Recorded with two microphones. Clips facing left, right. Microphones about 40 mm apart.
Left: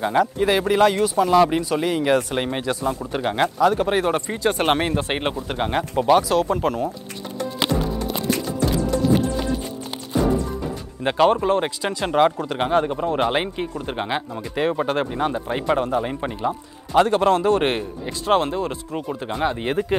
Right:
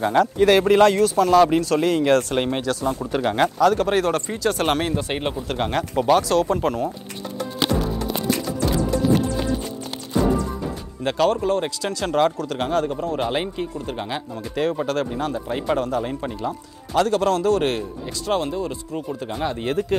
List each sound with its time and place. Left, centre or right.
0.0 s speech: centre
1.0 s speech: centre
2.6 s speech: centre
5.5 s speech: centre
11.1 s speech: left
18.9 s speech: left